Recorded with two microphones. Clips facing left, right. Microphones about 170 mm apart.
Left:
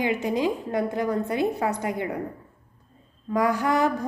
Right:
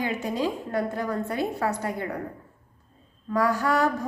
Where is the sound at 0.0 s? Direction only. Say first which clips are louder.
Left 3 dB; 15° left (ahead or behind).